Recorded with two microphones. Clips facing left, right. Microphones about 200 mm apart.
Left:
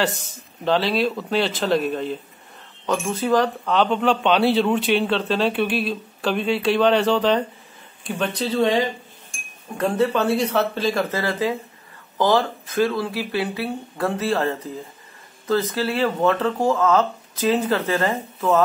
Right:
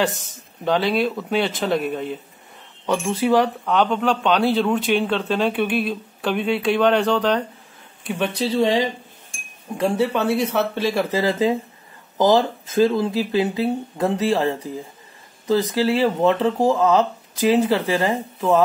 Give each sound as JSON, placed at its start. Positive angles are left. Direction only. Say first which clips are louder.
{"t": 0.0, "sound": "speech", "louder": "right 1 dB", "side_deg": 0}
{"t": 3.2, "sound": "speech", "louder": "right 2 dB", "side_deg": -10}
{"t": 8.2, "sound": "speech", "louder": "right 1 dB", "side_deg": -10}